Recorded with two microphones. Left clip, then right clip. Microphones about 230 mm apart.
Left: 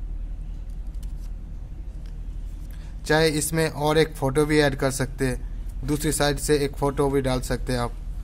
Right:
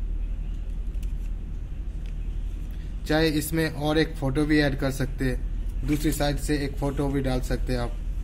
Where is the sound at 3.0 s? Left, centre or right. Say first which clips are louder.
Left 3 dB; left.